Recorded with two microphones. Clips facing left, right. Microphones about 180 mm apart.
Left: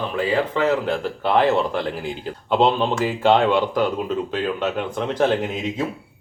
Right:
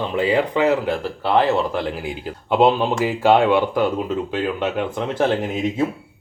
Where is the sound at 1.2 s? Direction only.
5° right (ahead or behind).